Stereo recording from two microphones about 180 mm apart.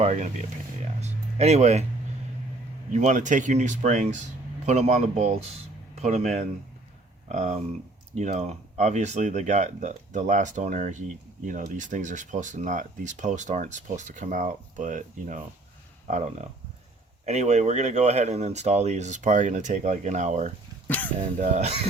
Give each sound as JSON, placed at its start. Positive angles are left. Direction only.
{"t": 0.0, "sound": "speech", "side_deg": -40}
{"t": 2.9, "sound": "speech", "side_deg": -45}
{"t": 20.8, "sound": "a sound", "side_deg": 10}
{"t": 21.3, "sound": "speech", "side_deg": -40}